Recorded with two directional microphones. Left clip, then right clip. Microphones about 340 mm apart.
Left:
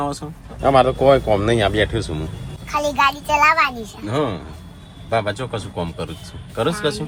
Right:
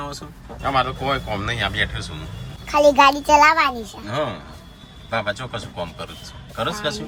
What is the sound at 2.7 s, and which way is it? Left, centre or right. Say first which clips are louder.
A child's voice: right 4 dB; right.